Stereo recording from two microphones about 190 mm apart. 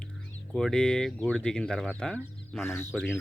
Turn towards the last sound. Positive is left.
turn(degrees=0)  # may be behind; listen again after turning